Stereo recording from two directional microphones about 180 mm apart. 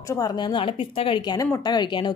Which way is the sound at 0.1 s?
20° left (ahead or behind).